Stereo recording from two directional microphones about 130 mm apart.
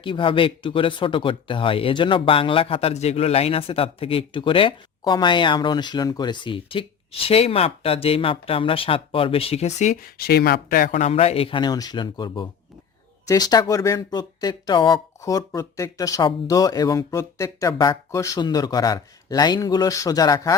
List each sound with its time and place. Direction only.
0.0 s speech: 40° left (ahead or behind); by 10.0 s 65° left (ahead or behind)
10.7 s speech: 75° left (ahead or behind); by 20.6 s 25° left (ahead or behind)